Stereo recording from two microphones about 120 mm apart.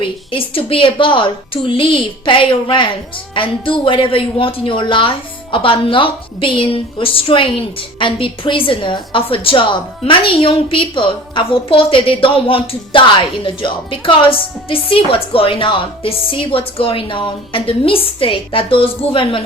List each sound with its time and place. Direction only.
0.0 s a woman's voice: 50° left (ahead or behind)